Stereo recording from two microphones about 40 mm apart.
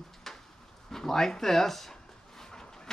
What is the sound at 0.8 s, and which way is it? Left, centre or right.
Speech, centre.